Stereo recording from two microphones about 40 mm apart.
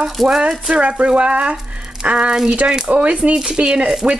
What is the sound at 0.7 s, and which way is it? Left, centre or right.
Speech, right.